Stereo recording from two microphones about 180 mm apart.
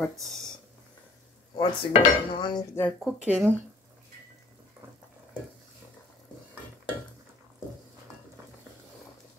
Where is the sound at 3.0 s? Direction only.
5° right (ahead or behind).